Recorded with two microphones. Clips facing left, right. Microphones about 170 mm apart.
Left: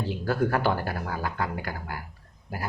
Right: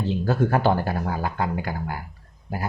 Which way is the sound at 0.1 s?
25° right (ahead or behind).